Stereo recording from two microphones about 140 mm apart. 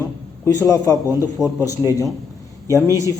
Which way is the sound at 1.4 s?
5° right (ahead or behind).